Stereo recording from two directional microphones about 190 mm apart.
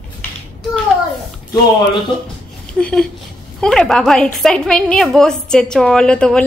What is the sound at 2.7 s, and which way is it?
A woman's voice, 5° left (ahead or behind).